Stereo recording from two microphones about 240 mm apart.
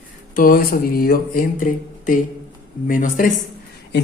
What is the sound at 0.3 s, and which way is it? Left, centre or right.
Speech, left.